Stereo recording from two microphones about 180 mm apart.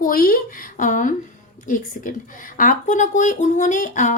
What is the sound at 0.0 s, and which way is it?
Speech, 55° left (ahead or behind).